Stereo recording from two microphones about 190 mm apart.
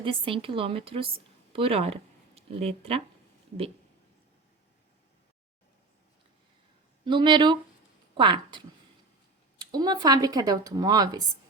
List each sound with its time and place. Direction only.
0.0 s speech: 25° right (ahead or behind)
7.0 s speech: 25° right (ahead or behind)